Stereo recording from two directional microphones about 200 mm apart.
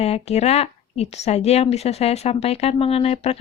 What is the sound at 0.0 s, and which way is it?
A woman's voice, 30° left (ahead or behind).